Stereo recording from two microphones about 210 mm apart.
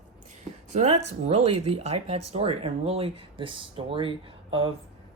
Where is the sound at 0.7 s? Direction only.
35° right (ahead or behind).